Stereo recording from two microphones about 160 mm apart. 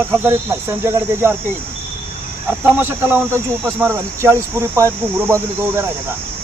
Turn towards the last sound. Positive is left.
turn(degrees=-15)  # may be behind; listen again after turning